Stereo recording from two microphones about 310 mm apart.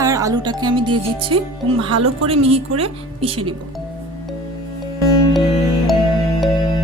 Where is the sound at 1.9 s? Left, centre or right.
Right.